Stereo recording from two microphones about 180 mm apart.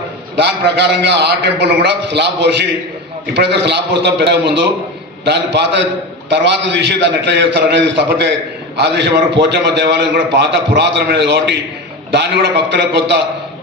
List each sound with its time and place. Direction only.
0.3 s a man's voice: 70° right (ahead or behind)